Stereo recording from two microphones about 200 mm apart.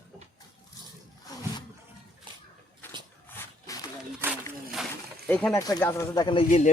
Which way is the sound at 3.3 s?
15° left (ahead or behind).